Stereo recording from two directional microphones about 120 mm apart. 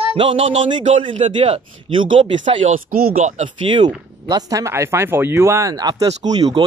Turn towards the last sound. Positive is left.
turn(degrees=-30)  # may be behind; listen again after turning